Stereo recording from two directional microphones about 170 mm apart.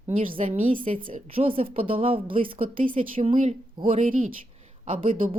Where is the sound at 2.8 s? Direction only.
55° right (ahead or behind).